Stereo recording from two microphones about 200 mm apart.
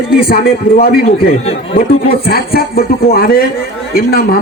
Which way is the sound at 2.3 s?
50° left (ahead or behind).